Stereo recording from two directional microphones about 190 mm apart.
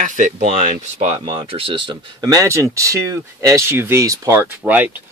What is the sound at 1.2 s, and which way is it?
Speech, 25° right (ahead or behind).